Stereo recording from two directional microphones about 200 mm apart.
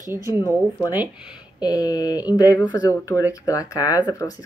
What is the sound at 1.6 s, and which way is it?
Speech, 20° left (ahead or behind).